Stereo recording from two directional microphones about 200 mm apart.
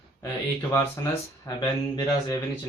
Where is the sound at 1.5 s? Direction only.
15° left (ahead or behind).